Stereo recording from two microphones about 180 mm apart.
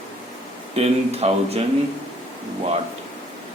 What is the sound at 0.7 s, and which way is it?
Speech, 35° right (ahead or behind).